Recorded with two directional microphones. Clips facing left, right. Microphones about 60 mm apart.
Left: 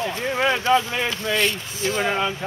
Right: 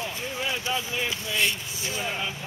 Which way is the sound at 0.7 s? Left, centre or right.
Left.